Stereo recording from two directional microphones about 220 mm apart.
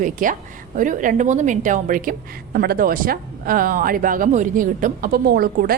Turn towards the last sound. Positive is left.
turn(degrees=-45)  # may be behind; listen again after turning